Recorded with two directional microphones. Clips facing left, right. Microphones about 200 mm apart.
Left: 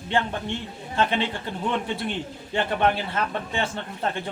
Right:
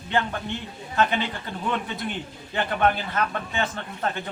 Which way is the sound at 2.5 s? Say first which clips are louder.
Even; 25° left (ahead or behind).